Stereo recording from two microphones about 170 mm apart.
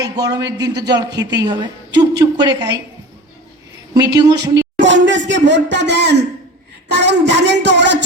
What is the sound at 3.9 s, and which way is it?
Speech, 25° right (ahead or behind).